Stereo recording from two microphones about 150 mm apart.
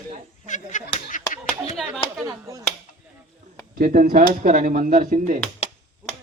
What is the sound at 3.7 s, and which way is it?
Speech, 70° right (ahead or behind).